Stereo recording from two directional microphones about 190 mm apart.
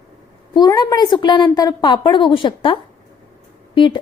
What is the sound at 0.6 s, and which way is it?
A woman's voice, 20° left (ahead or behind).